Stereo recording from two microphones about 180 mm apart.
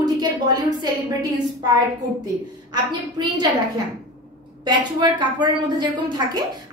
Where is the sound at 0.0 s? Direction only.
20° right (ahead or behind).